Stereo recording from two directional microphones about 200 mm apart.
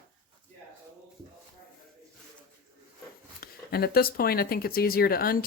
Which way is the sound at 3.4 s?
50° left (ahead or behind).